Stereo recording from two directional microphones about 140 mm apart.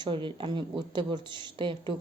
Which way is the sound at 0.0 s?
35° right (ahead or behind).